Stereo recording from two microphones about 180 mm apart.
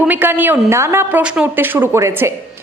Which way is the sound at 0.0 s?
10° right (ahead or behind).